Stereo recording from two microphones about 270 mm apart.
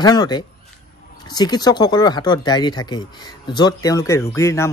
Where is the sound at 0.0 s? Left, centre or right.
Centre.